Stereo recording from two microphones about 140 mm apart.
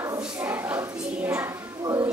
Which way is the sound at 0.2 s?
15° right (ahead or behind).